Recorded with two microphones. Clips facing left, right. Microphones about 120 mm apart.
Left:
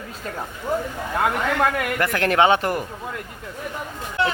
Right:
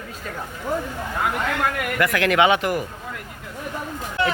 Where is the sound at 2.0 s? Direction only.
35° left (ahead or behind).